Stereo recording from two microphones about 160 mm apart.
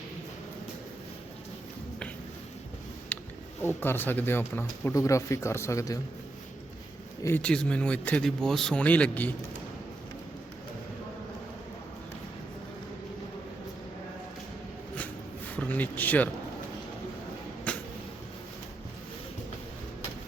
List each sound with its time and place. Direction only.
3.6 s speech: 15° left (ahead or behind)
7.2 s speech: 15° left (ahead or behind)
7.4 s speech: 5° left (ahead or behind)
15.5 s speech: 10° left (ahead or behind)
17.7 s a sound: 5° left (ahead or behind)